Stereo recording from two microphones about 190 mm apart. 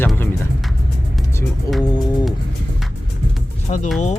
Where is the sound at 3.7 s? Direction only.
35° left (ahead or behind).